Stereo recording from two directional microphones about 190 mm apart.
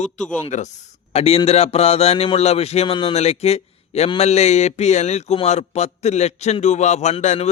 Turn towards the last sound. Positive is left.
turn(degrees=35)  # may be behind; listen again after turning